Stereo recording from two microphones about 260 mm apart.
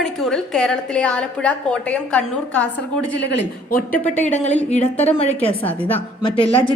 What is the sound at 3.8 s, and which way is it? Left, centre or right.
Speech, centre.